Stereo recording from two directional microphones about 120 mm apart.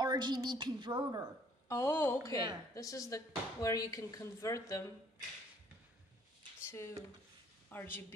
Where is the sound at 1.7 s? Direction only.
20° left (ahead or behind).